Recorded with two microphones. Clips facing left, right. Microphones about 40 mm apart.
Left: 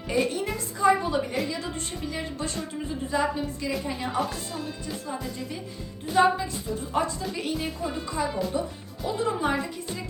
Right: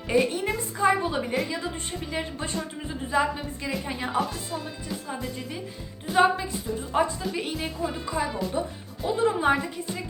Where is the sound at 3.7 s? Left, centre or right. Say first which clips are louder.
Right 3 dB; centre.